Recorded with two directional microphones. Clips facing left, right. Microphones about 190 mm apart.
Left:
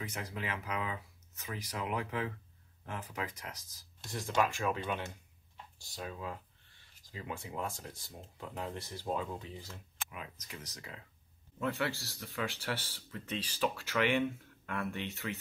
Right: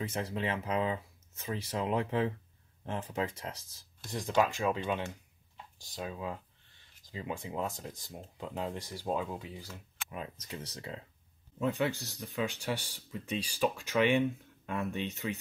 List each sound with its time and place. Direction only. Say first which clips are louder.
0.0 s speech: right 6 dB; 30° right (ahead or behind)
4.2 s speech: right 3 dB; 15° right (ahead or behind)
10.0 s speech: right 6 dB; 35° right (ahead or behind)
11.6 s speech: right 4 dB; 20° right (ahead or behind)